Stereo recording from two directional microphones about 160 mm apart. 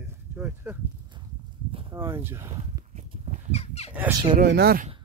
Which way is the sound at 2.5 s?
45° right (ahead or behind).